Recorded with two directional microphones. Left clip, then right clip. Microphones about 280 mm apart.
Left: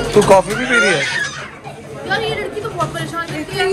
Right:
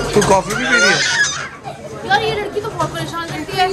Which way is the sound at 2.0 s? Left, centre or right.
Right.